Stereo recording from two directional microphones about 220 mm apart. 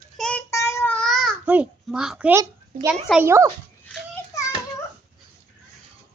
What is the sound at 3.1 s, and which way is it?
Speech, 10° right (ahead or behind).